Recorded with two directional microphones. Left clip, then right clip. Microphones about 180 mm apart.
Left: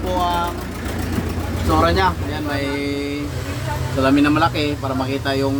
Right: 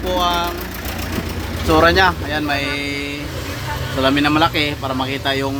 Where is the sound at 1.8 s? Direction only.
25° right (ahead or behind).